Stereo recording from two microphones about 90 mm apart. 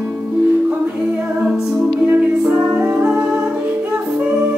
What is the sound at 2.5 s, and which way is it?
Music, 25° right (ahead or behind).